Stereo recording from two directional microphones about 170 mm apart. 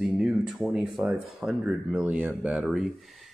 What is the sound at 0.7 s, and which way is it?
Speech, 5° right (ahead or behind).